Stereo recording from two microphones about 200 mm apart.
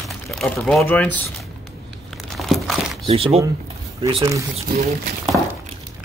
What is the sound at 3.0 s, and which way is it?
Speech, 30° right (ahead or behind).